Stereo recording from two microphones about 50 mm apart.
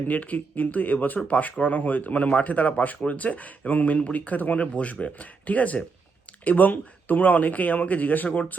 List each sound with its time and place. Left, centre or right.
0.1 s speech: left